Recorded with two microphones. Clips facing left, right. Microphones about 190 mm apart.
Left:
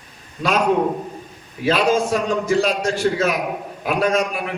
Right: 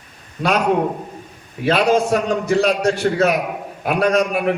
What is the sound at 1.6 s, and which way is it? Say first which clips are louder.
A man's voice: right 2 dB; 60° right (ahead or behind).